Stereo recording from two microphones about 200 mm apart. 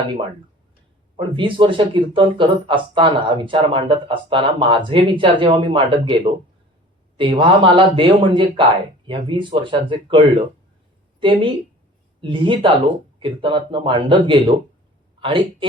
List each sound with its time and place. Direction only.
1.1 s speech: 25° right (ahead or behind)
7.2 s speech: 25° right (ahead or behind)